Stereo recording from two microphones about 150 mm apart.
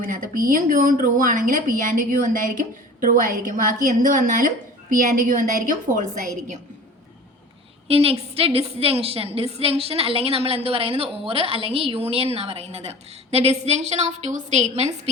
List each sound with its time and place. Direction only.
0.0 s a woman's voice: 65° right (ahead or behind)
7.9 s a woman's voice: 40° right (ahead or behind)